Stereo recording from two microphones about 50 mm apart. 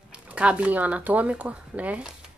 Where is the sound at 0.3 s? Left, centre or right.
Right.